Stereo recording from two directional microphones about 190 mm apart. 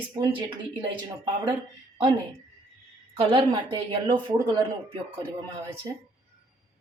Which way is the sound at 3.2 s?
25° right (ahead or behind).